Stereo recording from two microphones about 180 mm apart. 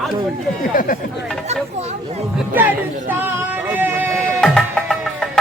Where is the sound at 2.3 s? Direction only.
10° right (ahead or behind).